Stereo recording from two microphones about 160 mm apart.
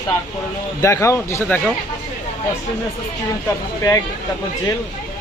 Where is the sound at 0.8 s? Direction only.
20° left (ahead or behind).